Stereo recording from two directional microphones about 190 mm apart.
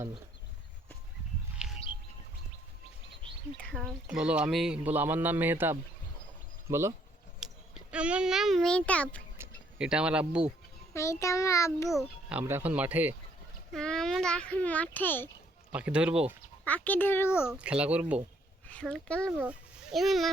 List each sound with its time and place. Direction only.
1.6 s bird: 5° right (ahead or behind)
3.6 s a woman's voice: 5° left (ahead or behind); by 6.9 s 15° right (ahead or behind)
7.3 s a child's voice: centre (ahead or behind)
9.4 s speech: 5° right (ahead or behind)
10.9 s a child's voice: 15° left (ahead or behind)
11.9 s a woman's voice: 5° right (ahead or behind)
13.7 s a child's voice: 5° left (ahead or behind)
15.7 s speech: 5° right (ahead or behind)
16.6 s a child's voice: 10° left (ahead or behind)
17.4 s a woman's voice: 5° right (ahead or behind)
18.7 s a child's voice: 5° left (ahead or behind)